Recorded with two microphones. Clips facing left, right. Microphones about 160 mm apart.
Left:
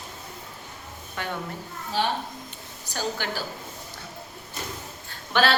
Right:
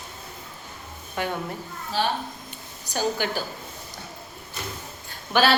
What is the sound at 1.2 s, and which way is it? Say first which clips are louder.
Speech: right 5 dB; 15° right (ahead or behind).